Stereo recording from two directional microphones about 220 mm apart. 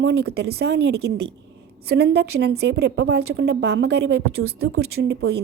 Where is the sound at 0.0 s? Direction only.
50° right (ahead or behind).